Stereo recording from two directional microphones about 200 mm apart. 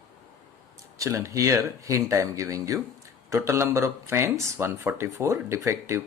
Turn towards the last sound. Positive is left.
turn(degrees=-15)  # may be behind; listen again after turning